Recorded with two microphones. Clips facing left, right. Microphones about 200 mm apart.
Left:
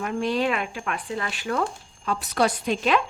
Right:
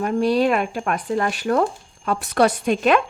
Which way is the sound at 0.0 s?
40° right (ahead or behind).